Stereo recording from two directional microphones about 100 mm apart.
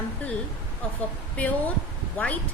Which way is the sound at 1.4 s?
15° left (ahead or behind).